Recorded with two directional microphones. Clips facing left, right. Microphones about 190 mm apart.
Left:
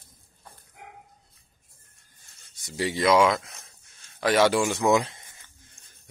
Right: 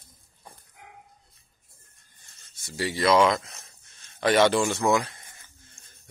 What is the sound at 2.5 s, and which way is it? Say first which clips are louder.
Speech: left 2 dB; 20° left (ahead or behind).